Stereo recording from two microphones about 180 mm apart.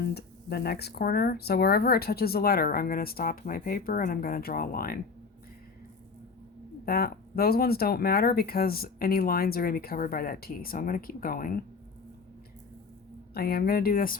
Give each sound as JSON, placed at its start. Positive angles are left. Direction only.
{"t": 0.1, "sound": "speech", "side_deg": 60}
{"t": 6.8, "sound": "speech", "side_deg": 60}
{"t": 13.3, "sound": "speech", "side_deg": 60}